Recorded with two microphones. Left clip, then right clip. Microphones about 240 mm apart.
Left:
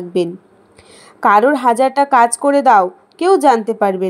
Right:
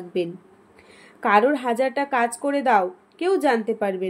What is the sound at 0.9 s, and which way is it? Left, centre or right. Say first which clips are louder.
Speech: left 7 dB; left.